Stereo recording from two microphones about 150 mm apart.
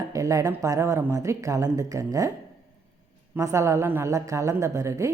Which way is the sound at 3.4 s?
20° right (ahead or behind).